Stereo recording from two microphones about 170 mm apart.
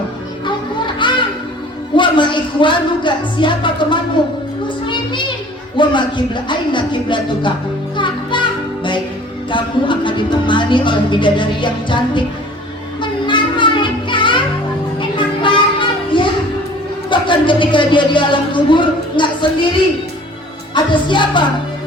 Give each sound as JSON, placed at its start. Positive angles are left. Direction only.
{"t": 1.0, "sound": "music", "side_deg": 30}
{"t": 2.0, "sound": "speech", "side_deg": 30}
{"t": 5.7, "sound": "speech", "side_deg": 30}
{"t": 7.9, "sound": "music", "side_deg": 30}
{"t": 9.5, "sound": "speech", "side_deg": 30}
{"t": 13.0, "sound": "music", "side_deg": 30}
{"t": 17.1, "sound": "speech", "side_deg": 30}
{"t": 20.7, "sound": "speech", "side_deg": 30}